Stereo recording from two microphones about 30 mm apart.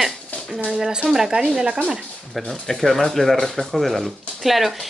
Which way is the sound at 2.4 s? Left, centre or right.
Centre.